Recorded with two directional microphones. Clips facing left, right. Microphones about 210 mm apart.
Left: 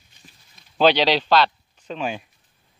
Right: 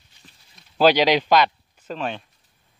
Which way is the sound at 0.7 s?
10° right (ahead or behind).